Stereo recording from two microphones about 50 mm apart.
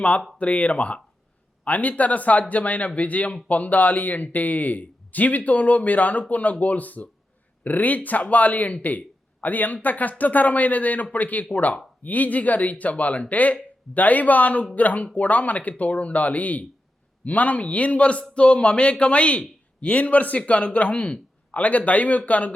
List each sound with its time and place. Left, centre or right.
0.3 s speech: left